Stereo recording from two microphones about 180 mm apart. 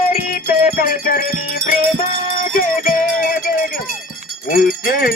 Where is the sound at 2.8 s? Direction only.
55° left (ahead or behind).